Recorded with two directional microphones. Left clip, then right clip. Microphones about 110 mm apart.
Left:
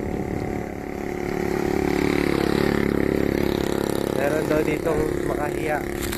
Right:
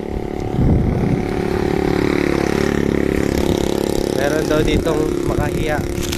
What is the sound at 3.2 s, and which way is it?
Vehicle, 40° right (ahead or behind).